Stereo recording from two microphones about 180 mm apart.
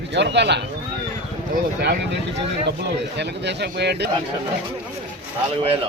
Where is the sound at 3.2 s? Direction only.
70° right (ahead or behind).